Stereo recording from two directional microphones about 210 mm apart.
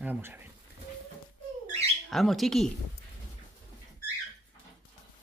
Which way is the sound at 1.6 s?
30° right (ahead or behind).